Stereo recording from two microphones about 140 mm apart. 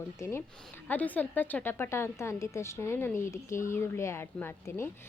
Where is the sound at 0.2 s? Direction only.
20° left (ahead or behind).